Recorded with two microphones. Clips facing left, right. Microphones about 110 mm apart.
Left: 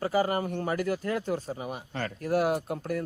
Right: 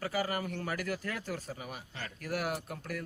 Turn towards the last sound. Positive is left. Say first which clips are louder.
# left 9 dB
turn(degrees=35)  # may be behind; listen again after turning